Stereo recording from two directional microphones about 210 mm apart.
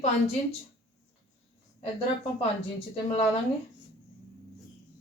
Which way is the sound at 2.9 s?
25° left (ahead or behind).